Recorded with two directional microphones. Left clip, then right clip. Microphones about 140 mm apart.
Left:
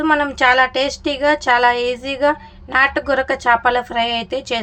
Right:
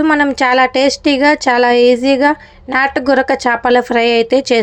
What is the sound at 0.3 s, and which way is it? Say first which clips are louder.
A woman's voice: right 3 dB; 35° right (ahead or behind).